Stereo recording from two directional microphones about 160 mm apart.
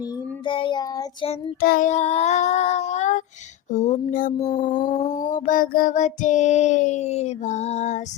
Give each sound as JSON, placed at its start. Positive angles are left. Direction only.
{"t": 0.4, "sound": "child singing", "side_deg": 30}
{"t": 1.6, "sound": "child singing", "side_deg": 65}
{"t": 1.9, "sound": "child singing", "side_deg": 45}
{"t": 4.4, "sound": "a sound", "side_deg": 25}
{"t": 5.2, "sound": "child singing", "side_deg": 55}